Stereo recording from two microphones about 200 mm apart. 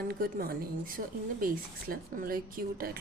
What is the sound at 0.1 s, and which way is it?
A woman's voice, 50° right (ahead or behind).